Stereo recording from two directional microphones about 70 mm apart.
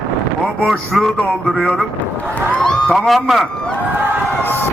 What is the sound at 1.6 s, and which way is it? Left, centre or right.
Speech, centre.